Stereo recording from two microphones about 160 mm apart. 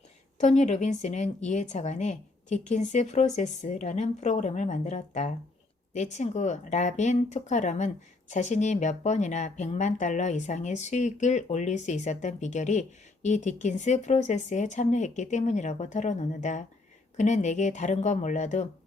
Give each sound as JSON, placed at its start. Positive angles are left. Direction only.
{"t": 0.3, "sound": "speech", "side_deg": 45}